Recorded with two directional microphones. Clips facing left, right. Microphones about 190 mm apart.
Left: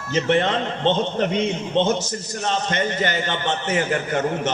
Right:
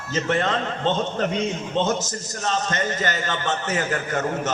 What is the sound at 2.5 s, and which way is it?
Speech, 20° left (ahead or behind).